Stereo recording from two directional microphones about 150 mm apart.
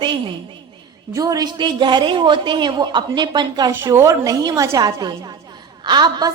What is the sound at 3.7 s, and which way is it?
A woman's voice, 20° right (ahead or behind).